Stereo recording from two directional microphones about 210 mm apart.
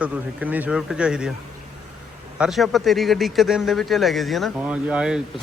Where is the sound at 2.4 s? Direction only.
Centre (ahead or behind).